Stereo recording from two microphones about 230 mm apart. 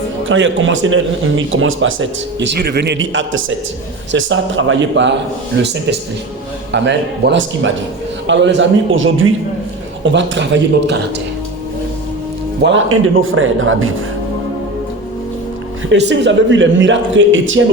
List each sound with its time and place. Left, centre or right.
0.3 s a man's voice: right
6.7 s a man's voice: right
12.6 s speech: right
15.9 s a man's voice: right